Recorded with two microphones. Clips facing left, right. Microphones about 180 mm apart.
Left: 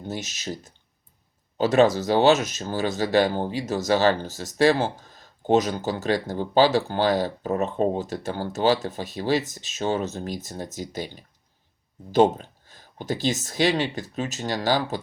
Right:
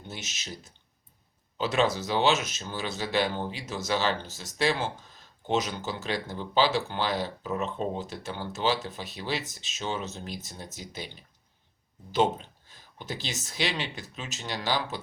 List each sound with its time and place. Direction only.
0.0 s speech: 40° left (ahead or behind)